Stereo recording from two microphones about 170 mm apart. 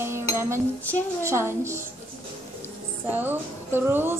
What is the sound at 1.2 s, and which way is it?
Speech, 15° right (ahead or behind).